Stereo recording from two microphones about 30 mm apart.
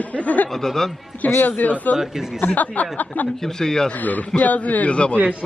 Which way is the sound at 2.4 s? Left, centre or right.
Left.